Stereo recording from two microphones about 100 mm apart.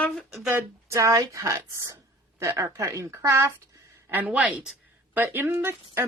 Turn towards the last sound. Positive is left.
turn(degrees=-25)  # may be behind; listen again after turning